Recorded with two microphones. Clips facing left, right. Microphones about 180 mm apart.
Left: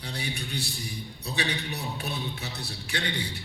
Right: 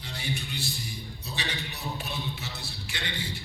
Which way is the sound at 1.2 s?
60° left (ahead or behind).